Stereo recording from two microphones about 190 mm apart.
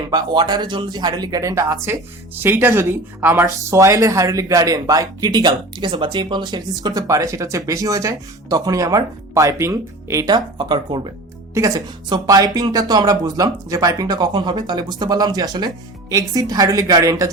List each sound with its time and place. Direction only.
0.1 s speech: 20° right (ahead or behind)